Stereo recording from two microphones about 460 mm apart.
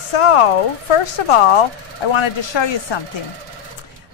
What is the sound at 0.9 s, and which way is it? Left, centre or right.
Speech, left.